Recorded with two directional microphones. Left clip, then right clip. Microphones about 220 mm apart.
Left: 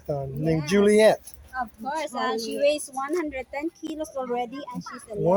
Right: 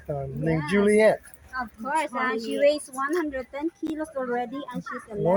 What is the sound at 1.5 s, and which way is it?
Speech, 30° right (ahead or behind).